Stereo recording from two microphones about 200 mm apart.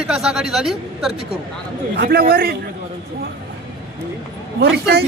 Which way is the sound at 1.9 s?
50° right (ahead or behind).